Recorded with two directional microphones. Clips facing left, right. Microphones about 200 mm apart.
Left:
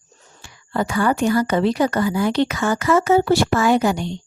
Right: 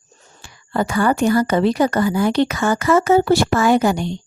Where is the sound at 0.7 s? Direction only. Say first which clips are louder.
Right 2 dB; 45° right (ahead or behind).